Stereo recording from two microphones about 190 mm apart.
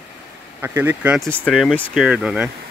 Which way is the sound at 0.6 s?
10° right (ahead or behind).